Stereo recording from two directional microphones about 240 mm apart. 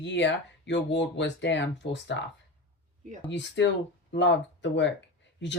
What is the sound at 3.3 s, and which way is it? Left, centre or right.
Speech, left.